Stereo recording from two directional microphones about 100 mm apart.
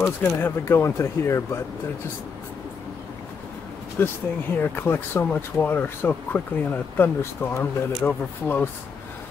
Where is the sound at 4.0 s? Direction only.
20° left (ahead or behind).